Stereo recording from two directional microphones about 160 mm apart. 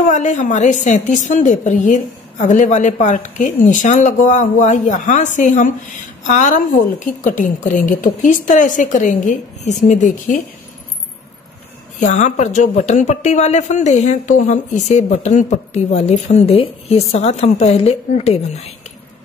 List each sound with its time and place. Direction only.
0.1 s speech: 50° left (ahead or behind)
12.0 s speech: 50° left (ahead or behind)